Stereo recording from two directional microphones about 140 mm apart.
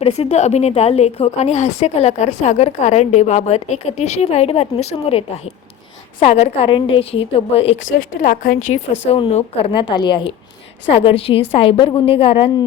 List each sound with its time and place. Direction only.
0.0 s a woman's voice: 50° left (ahead or behind)
7.9 s a woman's voice: 75° left (ahead or behind); by 9.1 s 60° left (ahead or behind)
9.1 s a woman's voice: 40° left (ahead or behind)
9.9 s a woman's voice: 35° left (ahead or behind)